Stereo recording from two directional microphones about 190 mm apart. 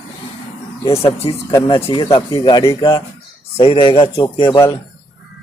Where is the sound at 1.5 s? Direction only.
20° left (ahead or behind).